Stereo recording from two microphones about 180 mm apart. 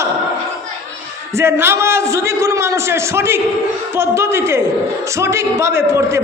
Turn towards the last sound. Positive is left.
turn(degrees=-15)  # may be behind; listen again after turning